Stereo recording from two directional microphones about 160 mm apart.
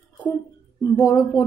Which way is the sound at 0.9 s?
20° left (ahead or behind).